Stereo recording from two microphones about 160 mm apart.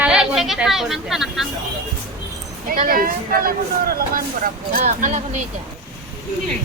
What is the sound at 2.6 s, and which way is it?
Speech, 60° right (ahead or behind).